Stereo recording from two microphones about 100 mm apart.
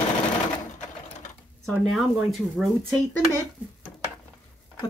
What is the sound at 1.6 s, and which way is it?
Speech, centre (ahead or behind).